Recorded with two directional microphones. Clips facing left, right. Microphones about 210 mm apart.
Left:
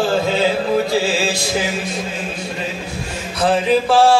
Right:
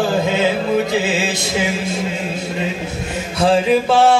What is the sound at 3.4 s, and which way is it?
Mantra, 25° right (ahead or behind).